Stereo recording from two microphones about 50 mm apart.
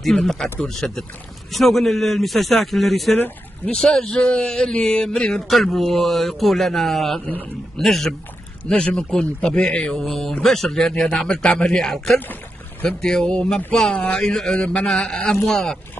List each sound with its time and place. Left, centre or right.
0.2 s a man's voice: centre
3.7 s speech: centre
4.8 s a man's voice: centre
8.6 s a man's voice: centre
10.0 s a man's voice: centre
11.2 s a man's voice: centre
14.5 s a man's voice: left